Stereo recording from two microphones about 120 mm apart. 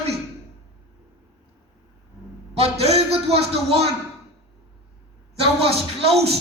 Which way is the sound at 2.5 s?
60° right (ahead or behind).